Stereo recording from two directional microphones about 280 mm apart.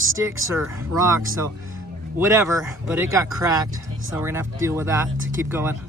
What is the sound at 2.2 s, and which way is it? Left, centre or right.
Speech, centre.